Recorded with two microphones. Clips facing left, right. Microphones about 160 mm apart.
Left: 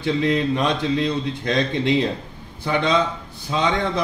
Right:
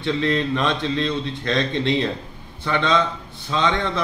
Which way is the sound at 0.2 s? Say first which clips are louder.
Left 1 dB; 10° left (ahead or behind).